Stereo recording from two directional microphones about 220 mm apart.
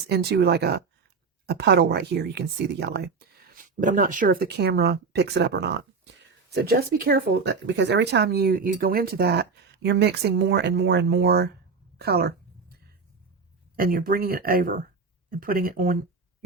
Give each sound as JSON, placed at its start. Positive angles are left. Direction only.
{"t": 0.1, "sound": "speech", "side_deg": -45}
{"t": 11.9, "sound": "a sound", "side_deg": -45}
{"t": 13.7, "sound": "speech", "side_deg": -40}